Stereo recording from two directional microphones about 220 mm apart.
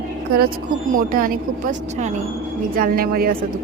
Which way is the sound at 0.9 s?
40° right (ahead or behind).